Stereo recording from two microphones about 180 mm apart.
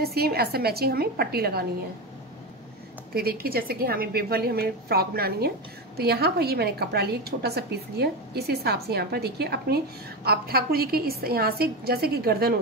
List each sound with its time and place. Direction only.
0.0 s a woman's voice: 60° right (ahead or behind)
3.2 s a woman's voice: 55° right (ahead or behind)